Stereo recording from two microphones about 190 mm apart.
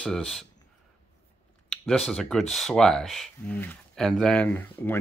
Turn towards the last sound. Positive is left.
turn(degrees=10)  # may be behind; listen again after turning